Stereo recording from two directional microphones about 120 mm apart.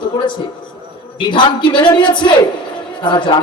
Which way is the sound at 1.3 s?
40° left (ahead or behind).